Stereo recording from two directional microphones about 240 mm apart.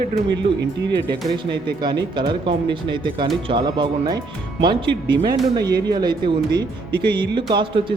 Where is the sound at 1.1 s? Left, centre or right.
Centre.